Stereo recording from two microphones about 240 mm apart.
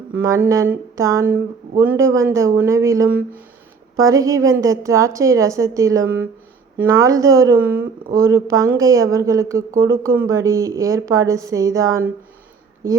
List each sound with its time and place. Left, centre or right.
0.1 s a woman's voice: centre